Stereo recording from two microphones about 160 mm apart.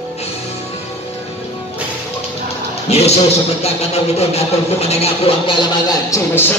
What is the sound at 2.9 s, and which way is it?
A man's voice, 40° left (ahead or behind).